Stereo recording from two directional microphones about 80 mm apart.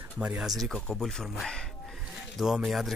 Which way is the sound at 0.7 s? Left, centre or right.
Centre.